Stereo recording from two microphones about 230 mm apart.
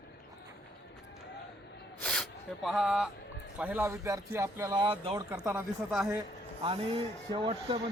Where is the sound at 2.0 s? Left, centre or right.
Centre.